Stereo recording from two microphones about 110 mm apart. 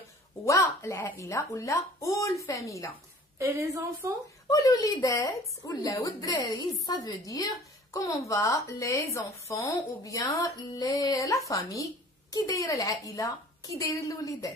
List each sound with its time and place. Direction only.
0.5 s speech: 30° left (ahead or behind)
3.3 s a woman's voice: 30° right (ahead or behind)
4.5 s speech: 30° left (ahead or behind)